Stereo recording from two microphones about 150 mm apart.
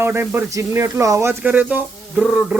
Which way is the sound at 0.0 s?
15° right (ahead or behind).